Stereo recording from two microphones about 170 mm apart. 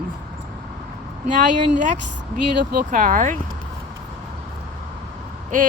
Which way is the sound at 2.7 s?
55° right (ahead or behind).